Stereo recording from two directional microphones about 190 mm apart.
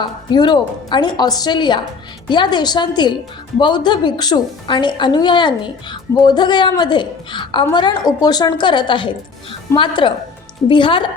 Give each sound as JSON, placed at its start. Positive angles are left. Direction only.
{"t": 0.0, "sound": "a woman's voice", "side_deg": 25}